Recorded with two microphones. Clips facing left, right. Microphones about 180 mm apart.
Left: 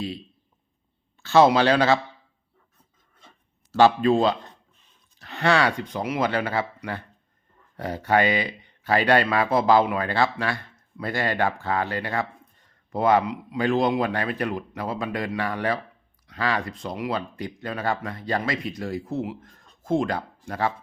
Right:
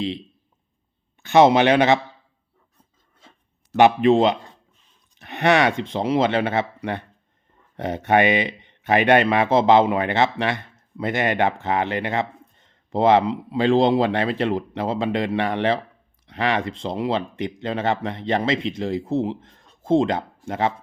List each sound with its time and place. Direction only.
1.2 s speech: 20° right (ahead or behind)
3.7 s speech: 20° right (ahead or behind)